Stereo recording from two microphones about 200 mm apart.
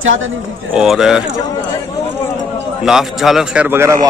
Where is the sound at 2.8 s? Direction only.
Centre (ahead or behind).